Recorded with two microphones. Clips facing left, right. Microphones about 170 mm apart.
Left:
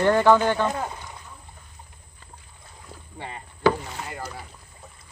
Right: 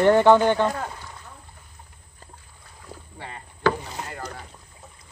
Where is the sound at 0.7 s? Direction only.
20° left (ahead or behind).